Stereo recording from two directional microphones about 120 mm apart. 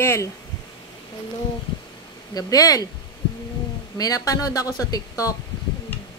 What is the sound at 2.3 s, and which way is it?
Speech, 30° left (ahead or behind).